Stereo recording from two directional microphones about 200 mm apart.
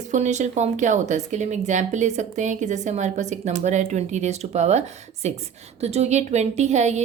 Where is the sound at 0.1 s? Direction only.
35° right (ahead or behind).